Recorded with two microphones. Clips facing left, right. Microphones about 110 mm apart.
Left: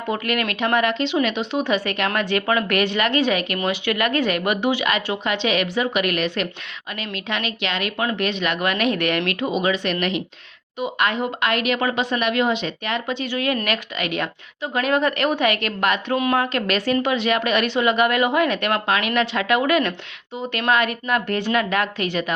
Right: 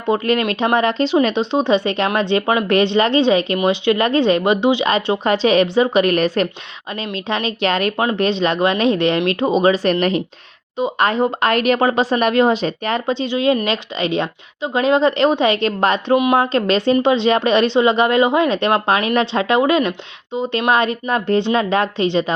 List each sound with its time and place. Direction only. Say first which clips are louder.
0.1 s speech: right 7 dB; 30° right (ahead or behind)
13.2 s speech: right 7 dB; 20° right (ahead or behind)
16.1 s a woman's voice: right 7 dB; 15° right (ahead or behind)
16.4 s speech: right 6 dB; 30° right (ahead or behind)